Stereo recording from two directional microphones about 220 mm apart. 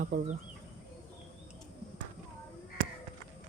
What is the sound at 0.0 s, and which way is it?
Speech, 35° right (ahead or behind).